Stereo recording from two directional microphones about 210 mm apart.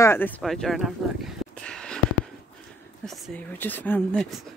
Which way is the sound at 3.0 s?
Centre (ahead or behind).